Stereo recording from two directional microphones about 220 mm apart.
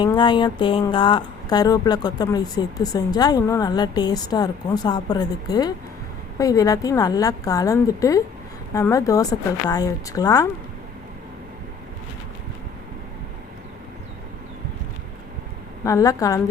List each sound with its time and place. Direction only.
0.0 s speech: 20° left (ahead or behind)
15.8 s speech: 15° left (ahead or behind)